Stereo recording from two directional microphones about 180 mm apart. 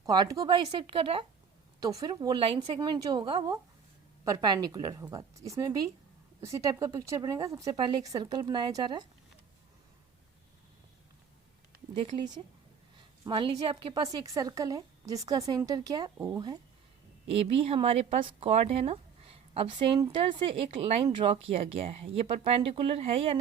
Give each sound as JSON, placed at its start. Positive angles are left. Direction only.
{"t": 0.0, "sound": "a woman's voice", "side_deg": -20}
{"t": 13.2, "sound": "a woman's voice", "side_deg": -25}
{"t": 17.6, "sound": "a woman's voice", "side_deg": -30}